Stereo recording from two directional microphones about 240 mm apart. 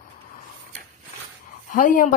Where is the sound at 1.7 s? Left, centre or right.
Left.